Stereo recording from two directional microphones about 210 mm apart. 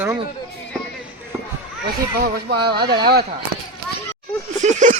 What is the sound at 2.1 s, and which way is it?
Speech, 45° right (ahead or behind).